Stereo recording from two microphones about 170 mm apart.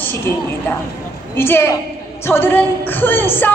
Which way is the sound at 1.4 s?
15° left (ahead or behind).